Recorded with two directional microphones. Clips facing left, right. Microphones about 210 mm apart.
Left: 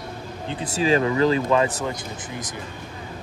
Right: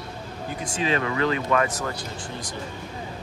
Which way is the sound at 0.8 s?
35° left (ahead or behind).